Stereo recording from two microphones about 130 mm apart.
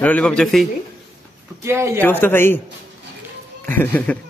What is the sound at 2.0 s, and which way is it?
Speech, 15° left (ahead or behind).